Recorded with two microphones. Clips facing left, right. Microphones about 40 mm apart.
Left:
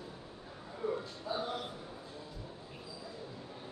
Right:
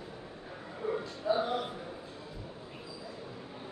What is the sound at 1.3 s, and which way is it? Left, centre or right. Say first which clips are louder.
Speech: right 8 dB; right.